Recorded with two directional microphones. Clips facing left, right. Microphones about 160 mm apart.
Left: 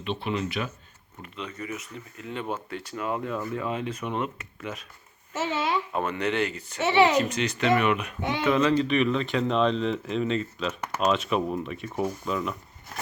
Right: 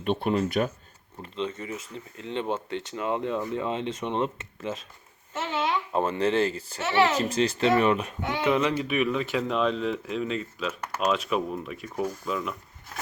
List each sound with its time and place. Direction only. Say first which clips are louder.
0.0 s speech: right 4 dB; 50° right (ahead or behind)
1.2 s speech: right 5 dB; 25° right (ahead or behind)
5.3 s babbling: left 1 dB; 5° left (ahead or behind)
5.9 s speech: right 3 dB; 30° right (ahead or behind)
8.4 s speech: left 2 dB; 15° right (ahead or behind)